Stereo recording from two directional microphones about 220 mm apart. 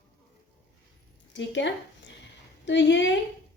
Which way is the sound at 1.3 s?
55° left (ahead or behind).